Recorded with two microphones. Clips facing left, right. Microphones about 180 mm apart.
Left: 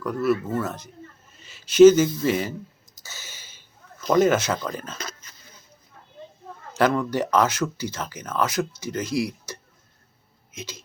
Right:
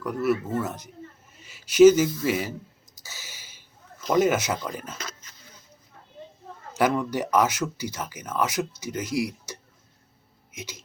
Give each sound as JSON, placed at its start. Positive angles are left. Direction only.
{"t": 0.0, "sound": "speech", "side_deg": -15}
{"t": 3.1, "sound": "gasp", "side_deg": -15}
{"t": 4.0, "sound": "speech", "side_deg": -10}
{"t": 6.7, "sound": "speech", "side_deg": -15}